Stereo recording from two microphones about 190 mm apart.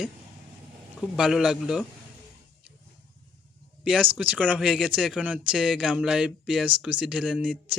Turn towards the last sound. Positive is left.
turn(degrees=-5)  # may be behind; listen again after turning